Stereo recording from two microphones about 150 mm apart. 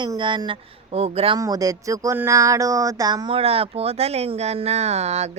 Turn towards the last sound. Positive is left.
turn(degrees=-45)  # may be behind; listen again after turning